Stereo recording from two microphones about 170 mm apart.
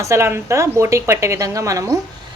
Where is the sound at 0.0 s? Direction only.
15° right (ahead or behind).